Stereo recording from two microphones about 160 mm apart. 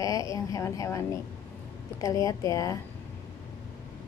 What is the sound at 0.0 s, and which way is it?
Speech, 20° left (ahead or behind).